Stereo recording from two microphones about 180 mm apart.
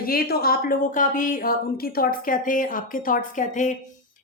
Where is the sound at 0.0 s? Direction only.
55° left (ahead or behind).